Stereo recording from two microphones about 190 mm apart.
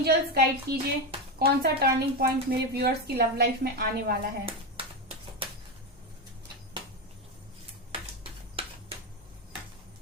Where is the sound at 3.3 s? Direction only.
55° right (ahead or behind).